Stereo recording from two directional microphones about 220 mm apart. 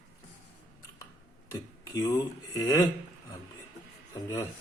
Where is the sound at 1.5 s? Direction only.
15° left (ahead or behind).